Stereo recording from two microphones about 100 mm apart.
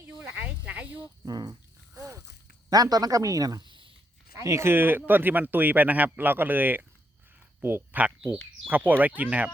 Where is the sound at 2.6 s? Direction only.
40° right (ahead or behind).